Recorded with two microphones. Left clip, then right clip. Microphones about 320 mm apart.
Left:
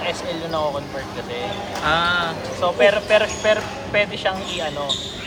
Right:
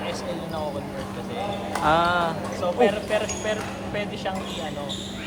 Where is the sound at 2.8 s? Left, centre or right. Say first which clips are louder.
Left 7 dB; left.